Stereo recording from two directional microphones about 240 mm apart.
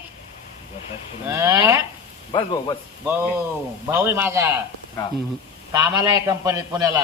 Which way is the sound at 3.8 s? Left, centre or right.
Centre.